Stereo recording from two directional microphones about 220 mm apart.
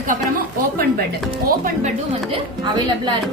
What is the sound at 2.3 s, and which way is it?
Speech, 20° right (ahead or behind).